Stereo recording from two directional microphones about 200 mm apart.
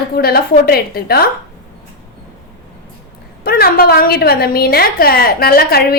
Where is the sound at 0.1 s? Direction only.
50° left (ahead or behind).